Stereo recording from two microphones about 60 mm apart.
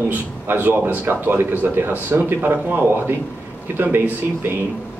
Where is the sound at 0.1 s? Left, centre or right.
Right.